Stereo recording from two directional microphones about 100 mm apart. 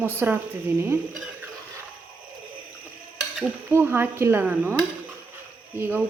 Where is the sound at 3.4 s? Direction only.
20° right (ahead or behind).